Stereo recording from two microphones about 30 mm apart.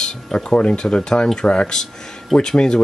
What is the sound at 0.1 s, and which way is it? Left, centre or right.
Speech, left.